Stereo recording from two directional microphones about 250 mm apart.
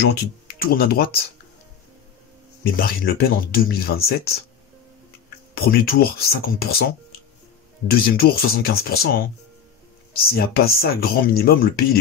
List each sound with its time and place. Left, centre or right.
0.6 s speech: left
2.6 s speech: left
5.6 s speech: left
7.9 s speech: left
10.2 s speech: left